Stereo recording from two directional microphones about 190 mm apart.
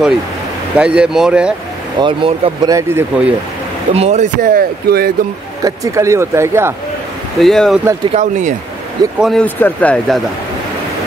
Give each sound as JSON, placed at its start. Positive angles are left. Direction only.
{"t": 0.7, "sound": "speech", "side_deg": -5}
{"t": 2.0, "sound": "speech", "side_deg": -25}
{"t": 2.7, "sound": "speech", "side_deg": -10}
{"t": 3.9, "sound": "speech", "side_deg": -35}
{"t": 5.6, "sound": "speech", "side_deg": -15}
{"t": 7.3, "sound": "speech", "side_deg": 0}
{"t": 8.0, "sound": "speech", "side_deg": -35}
{"t": 9.2, "sound": "speech", "side_deg": 5}